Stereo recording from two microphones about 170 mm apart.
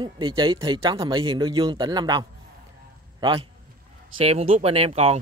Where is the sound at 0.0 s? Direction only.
25° right (ahead or behind).